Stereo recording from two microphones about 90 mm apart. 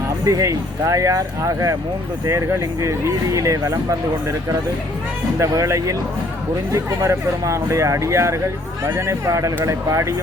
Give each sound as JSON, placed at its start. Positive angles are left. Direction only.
{"t": 0.3, "sound": "speech", "side_deg": -40}
{"t": 3.3, "sound": "speech", "side_deg": -40}
{"t": 5.4, "sound": "speech", "side_deg": -35}